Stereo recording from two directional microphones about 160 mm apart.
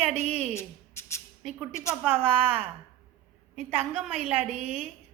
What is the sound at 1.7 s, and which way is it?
Speech, 20° left (ahead or behind).